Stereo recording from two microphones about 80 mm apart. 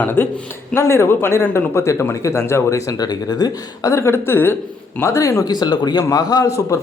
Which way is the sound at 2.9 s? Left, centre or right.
Left.